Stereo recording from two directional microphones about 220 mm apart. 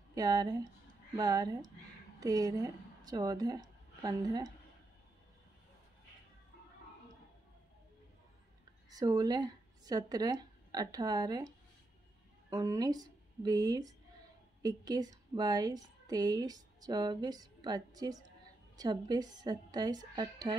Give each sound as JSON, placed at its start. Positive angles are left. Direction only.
{"t": 0.1, "sound": "a woman's voice", "side_deg": -15}
{"t": 8.9, "sound": "a woman's voice", "side_deg": -15}